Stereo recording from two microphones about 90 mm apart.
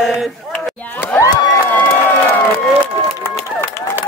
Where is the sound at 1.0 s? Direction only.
25° left (ahead or behind).